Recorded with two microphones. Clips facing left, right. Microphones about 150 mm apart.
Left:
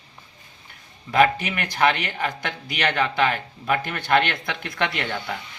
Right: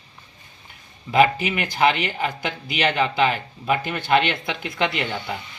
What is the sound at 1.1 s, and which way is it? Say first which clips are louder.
A man's voice: right 1 dB; 10° right (ahead or behind).